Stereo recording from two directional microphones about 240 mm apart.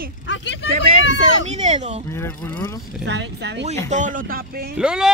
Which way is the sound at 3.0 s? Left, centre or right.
Right.